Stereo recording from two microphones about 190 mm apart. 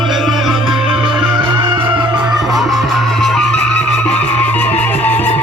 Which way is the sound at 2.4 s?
Centre (ahead or behind).